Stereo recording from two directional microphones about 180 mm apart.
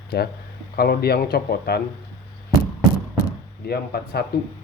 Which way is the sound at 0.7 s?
60° left (ahead or behind).